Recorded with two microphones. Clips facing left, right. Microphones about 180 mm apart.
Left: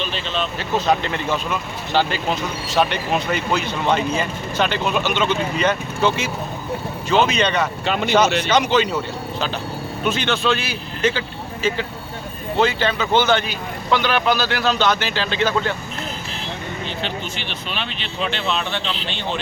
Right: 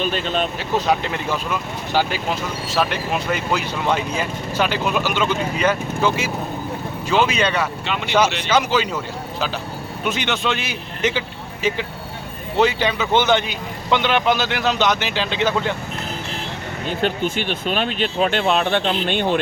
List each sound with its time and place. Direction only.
0.0 s speech: 45° right (ahead or behind)
0.9 s speech: 10° right (ahead or behind)
7.1 s speech: 10° right (ahead or behind)
7.9 s speech: 40° left (ahead or behind)
8.4 s speech: 5° right (ahead or behind)
10.0 s a man's voice: 15° right (ahead or behind)
16.8 s speech: 50° right (ahead or behind)